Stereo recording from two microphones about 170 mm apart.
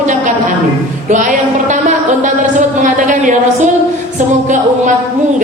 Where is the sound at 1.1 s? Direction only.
45° right (ahead or behind).